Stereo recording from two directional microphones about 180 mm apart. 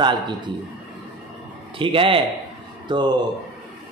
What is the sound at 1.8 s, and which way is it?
A man's voice, 30° right (ahead or behind).